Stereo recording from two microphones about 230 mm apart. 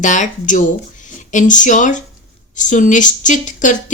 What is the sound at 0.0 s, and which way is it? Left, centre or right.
A woman's voice, left.